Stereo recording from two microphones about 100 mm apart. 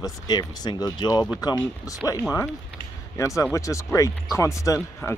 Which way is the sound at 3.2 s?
30° left (ahead or behind).